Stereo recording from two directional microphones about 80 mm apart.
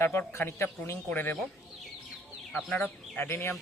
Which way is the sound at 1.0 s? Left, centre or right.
Left.